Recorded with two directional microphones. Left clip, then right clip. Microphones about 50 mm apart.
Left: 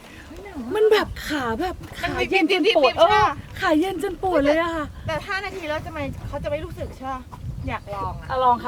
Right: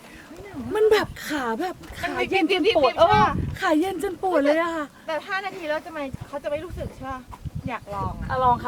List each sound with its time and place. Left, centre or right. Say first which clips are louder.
0.7 s speech: left 1 dB; centre
2.1 s speech: left 2 dB; left
3.6 s a woman's voice: left 2 dB; centre
5.0 s speech: even; left; by 8.1 s centre
8.3 s speech: left 2 dB; centre